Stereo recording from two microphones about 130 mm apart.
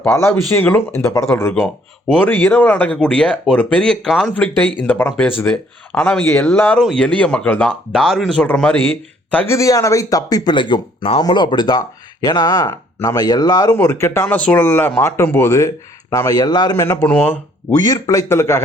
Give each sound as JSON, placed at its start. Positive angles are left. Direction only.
{"t": 0.1, "sound": "speech", "side_deg": 20}
{"t": 9.6, "sound": "speech", "side_deg": 25}
{"t": 17.7, "sound": "speech", "side_deg": 30}